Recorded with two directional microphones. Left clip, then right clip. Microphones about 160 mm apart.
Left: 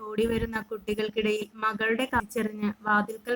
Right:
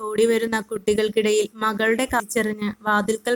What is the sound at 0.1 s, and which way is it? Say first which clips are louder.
A woman's voice: right 8 dB; 40° right (ahead or behind).